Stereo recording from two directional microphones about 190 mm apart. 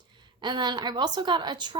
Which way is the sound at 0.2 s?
25° right (ahead or behind).